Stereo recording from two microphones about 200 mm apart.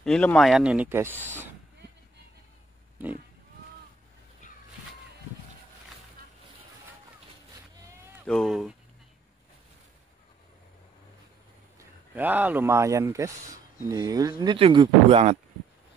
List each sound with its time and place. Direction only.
0.0 s speech: 5° left (ahead or behind); by 1.5 s 10° right (ahead or behind)
8.3 s speech: centre (ahead or behind)
12.2 s speech: 10° right (ahead or behind); by 15.3 s 30° right (ahead or behind)